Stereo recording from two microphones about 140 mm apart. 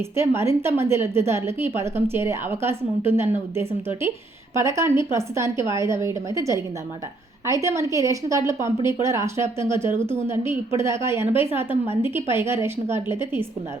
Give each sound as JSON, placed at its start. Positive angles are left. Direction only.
{"t": 0.2, "sound": "a woman's voice", "side_deg": -20}